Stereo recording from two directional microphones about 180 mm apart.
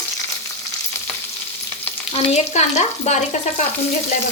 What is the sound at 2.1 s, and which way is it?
Frying, 35° left (ahead or behind).